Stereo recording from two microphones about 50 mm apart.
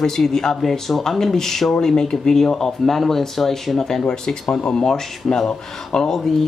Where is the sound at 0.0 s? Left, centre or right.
Centre.